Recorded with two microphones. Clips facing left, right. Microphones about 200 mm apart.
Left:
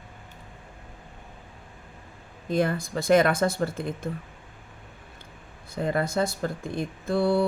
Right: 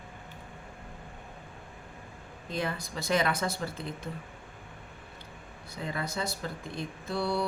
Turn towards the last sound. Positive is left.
turn(degrees=50)  # may be behind; listen again after turning